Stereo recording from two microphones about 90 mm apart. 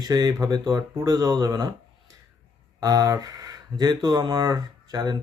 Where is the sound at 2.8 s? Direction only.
45° right (ahead or behind).